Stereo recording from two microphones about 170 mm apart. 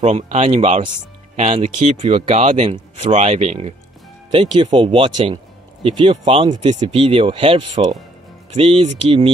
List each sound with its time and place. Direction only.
0.0 s speech: 40° right (ahead or behind)